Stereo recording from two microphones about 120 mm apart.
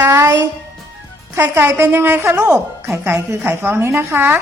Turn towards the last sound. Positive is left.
turn(degrees=-15)  # may be behind; listen again after turning